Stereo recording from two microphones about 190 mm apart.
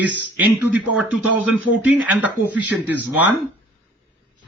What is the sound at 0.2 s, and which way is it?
Speech, 10° right (ahead or behind).